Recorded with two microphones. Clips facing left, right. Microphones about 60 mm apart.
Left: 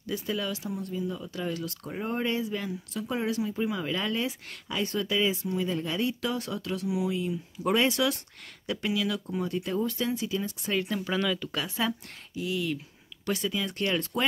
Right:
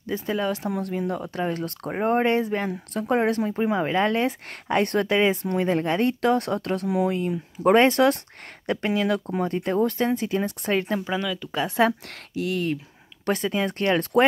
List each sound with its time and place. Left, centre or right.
0.0 s speech: right
0.7 s speech: right
1.4 s speech: right
10.7 s speech: right
11.2 s speech: centre
11.8 s speech: right
13.2 s speech: right